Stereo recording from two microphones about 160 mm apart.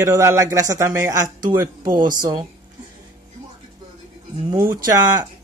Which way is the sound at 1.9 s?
55° right (ahead or behind).